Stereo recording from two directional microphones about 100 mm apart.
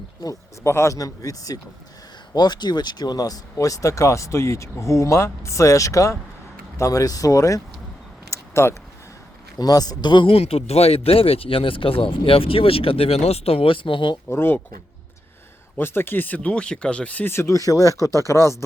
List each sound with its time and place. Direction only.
0.2 s speech: 40° left (ahead or behind)
8.3 s a sound: 30° left (ahead or behind)
9.6 s speech: 40° left (ahead or behind)
10.2 s speech: 75° left (ahead or behind); by 14.2 s 55° left (ahead or behind)
14.3 s speech: 20° left (ahead or behind)
15.8 s speech: 25° left (ahead or behind)